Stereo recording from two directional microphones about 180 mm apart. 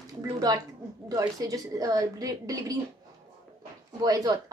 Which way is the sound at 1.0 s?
20° right (ahead or behind).